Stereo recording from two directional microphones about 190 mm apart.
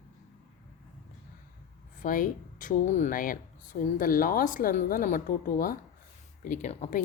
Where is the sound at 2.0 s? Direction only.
45° left (ahead or behind).